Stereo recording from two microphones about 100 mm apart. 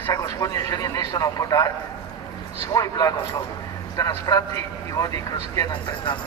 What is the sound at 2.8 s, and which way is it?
Speech, 35° left (ahead or behind).